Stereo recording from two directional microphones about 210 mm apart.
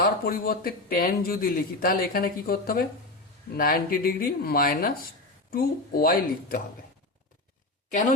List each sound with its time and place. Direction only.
0.0 s speech: 45° left (ahead or behind)